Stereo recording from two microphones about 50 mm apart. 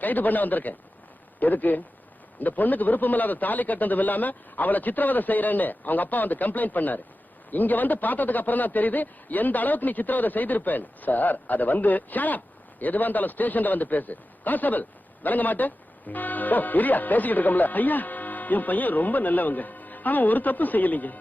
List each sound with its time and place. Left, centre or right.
0.0 s a man's voice: left